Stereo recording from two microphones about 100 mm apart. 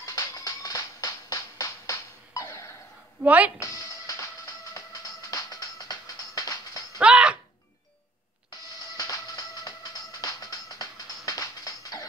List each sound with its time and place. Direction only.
0.0 s music: 35° left (ahead or behind)
3.3 s speech: 15° right (ahead or behind)
3.5 s music: 35° left (ahead or behind)
7.0 s a sound: 10° right (ahead or behind)
8.9 s music: 35° left (ahead or behind)